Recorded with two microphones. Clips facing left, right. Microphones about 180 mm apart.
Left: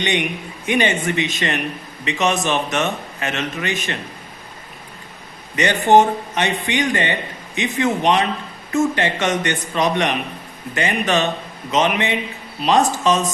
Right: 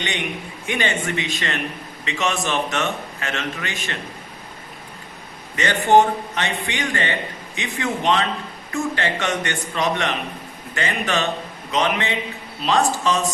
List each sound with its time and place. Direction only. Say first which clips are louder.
0.7 s a man's voice: left 5 dB; 20° left (ahead or behind)
5.5 s a man's voice: left 2 dB; 20° left (ahead or behind)